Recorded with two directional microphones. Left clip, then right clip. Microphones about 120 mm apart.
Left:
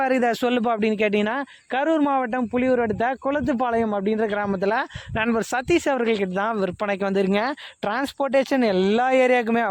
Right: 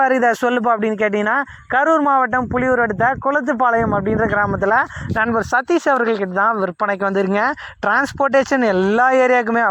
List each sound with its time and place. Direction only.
0.0 s a man's voice: 5° left (ahead or behind); by 4.4 s 25° left (ahead or behind)
4.4 s speech: 15° left (ahead or behind)